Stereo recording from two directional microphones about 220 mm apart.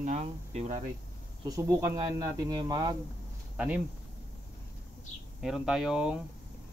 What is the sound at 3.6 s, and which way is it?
Speech, 5° right (ahead or behind).